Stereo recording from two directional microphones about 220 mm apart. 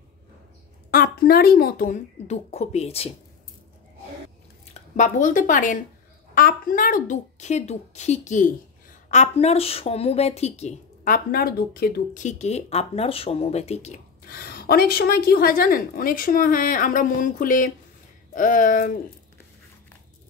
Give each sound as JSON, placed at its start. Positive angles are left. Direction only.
{"t": 0.9, "sound": "speech", "side_deg": 45}
{"t": 4.9, "sound": "speech", "side_deg": 35}